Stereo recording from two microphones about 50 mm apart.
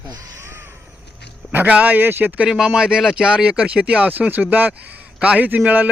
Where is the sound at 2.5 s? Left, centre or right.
Centre.